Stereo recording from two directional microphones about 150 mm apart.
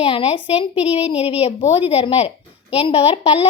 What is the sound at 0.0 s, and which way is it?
A woman's voice, 40° left (ahead or behind).